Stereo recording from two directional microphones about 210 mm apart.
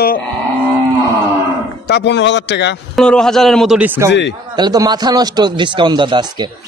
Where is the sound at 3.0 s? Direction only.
5° left (ahead or behind).